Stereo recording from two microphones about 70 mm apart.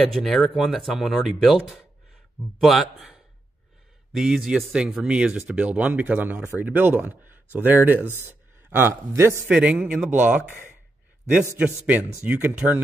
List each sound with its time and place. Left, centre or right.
0.1 s a man's voice: centre; by 9.5 s right
9.5 s speech: right
11.5 s speech: right